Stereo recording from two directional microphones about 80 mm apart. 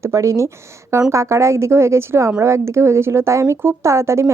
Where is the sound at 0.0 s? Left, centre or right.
Right.